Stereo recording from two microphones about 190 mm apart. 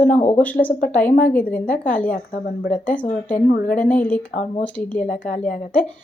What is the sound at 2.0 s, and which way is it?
Speech, 45° left (ahead or behind).